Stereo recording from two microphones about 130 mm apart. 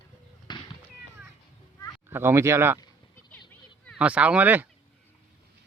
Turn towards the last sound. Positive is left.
turn(degrees=-15)  # may be behind; listen again after turning